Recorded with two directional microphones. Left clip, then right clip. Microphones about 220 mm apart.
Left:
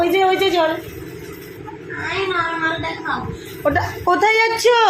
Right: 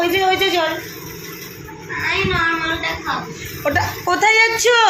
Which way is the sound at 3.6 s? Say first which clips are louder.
Left 1 dB; 15° left (ahead or behind).